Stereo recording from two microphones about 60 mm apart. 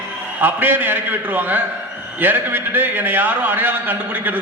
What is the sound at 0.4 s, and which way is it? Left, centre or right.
A man's voice, right.